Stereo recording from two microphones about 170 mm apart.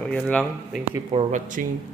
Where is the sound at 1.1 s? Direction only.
45° right (ahead or behind).